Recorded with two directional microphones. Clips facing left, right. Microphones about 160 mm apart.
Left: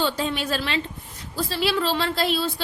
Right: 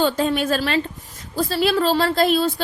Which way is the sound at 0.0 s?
50° right (ahead or behind).